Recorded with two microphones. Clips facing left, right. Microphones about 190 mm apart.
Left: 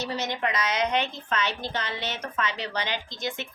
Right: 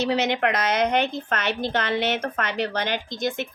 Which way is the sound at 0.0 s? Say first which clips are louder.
Right 7 dB; 75° right (ahead or behind).